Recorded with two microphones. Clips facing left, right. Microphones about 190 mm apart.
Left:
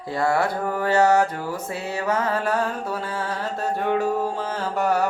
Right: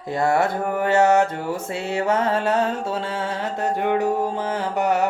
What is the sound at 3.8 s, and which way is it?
Music, 15° right (ahead or behind).